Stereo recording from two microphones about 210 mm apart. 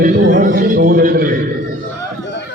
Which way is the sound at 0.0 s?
40° right (ahead or behind).